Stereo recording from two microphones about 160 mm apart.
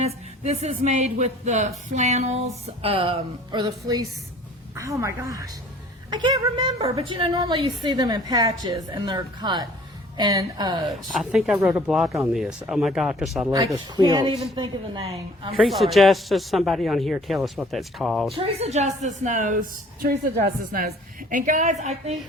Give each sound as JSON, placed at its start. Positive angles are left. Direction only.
{"t": 0.0, "sound": "a woman's voice", "side_deg": -40}
{"t": 6.7, "sound": "a woman's voice", "side_deg": -40}
{"t": 10.8, "sound": "a man's voice", "side_deg": 0}
{"t": 13.7, "sound": "a woman's voice", "side_deg": -25}
{"t": 15.5, "sound": "a man's voice", "side_deg": 0}
{"t": 18.3, "sound": "speech", "side_deg": -40}
{"t": 20.0, "sound": "a woman's voice", "side_deg": -80}